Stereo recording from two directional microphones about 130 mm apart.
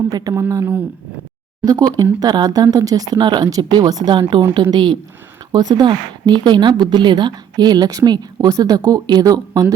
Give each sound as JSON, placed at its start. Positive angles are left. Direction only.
{"t": 0.1, "sound": "speech", "side_deg": -25}